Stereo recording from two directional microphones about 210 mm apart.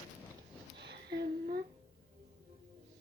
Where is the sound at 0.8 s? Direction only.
50° right (ahead or behind).